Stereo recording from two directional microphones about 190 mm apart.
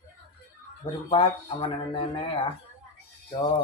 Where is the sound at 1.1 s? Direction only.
25° left (ahead or behind).